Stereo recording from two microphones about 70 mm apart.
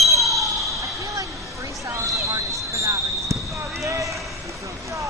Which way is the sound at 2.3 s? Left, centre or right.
Right.